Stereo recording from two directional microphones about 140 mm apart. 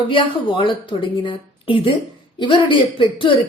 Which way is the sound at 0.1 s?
35° left (ahead or behind).